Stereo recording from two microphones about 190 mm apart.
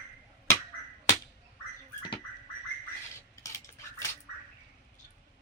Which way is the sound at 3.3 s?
15° left (ahead or behind).